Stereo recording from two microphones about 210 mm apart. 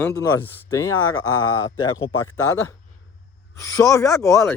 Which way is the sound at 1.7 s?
20° left (ahead or behind).